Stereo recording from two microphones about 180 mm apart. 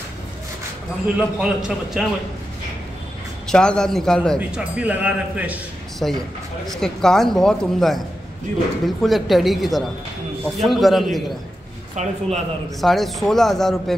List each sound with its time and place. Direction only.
1.0 s speech: 5° right (ahead or behind)
3.4 s a man's voice: 5° left (ahead or behind)
11.9 s speech: 40° right (ahead or behind)
12.8 s speech: centre (ahead or behind)